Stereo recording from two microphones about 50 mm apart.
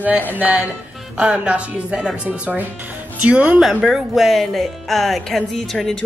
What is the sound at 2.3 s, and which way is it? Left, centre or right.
Speech, right.